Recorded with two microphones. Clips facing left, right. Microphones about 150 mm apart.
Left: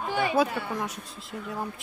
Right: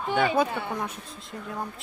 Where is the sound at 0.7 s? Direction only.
Centre (ahead or behind).